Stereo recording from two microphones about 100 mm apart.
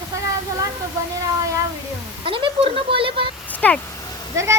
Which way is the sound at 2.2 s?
60° right (ahead or behind).